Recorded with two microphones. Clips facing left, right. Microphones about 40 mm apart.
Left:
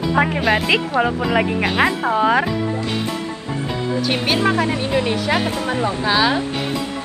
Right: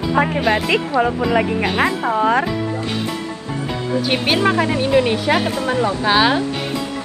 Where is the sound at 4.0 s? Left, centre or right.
Centre.